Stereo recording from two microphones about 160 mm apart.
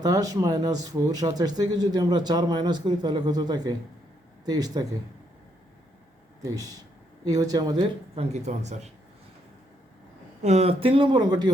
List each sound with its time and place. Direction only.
0.0 s speech: 20° right (ahead or behind)
7.3 s speech: 25° right (ahead or behind)
8.1 s speech: 40° right (ahead or behind)
10.4 s speech: 40° right (ahead or behind)